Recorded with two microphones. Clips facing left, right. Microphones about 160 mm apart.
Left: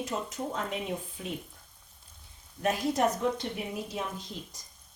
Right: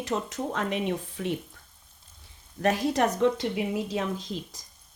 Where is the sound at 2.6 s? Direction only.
85° right.